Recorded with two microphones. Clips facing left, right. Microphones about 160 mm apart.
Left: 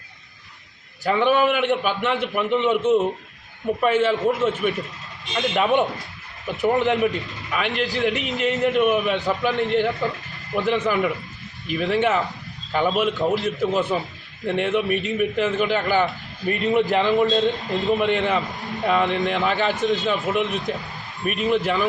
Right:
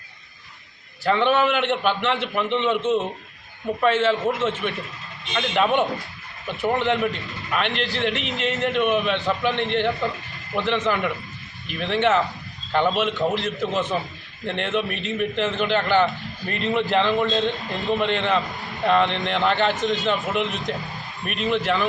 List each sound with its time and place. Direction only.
1.0 s a man's voice: 10° left (ahead or behind)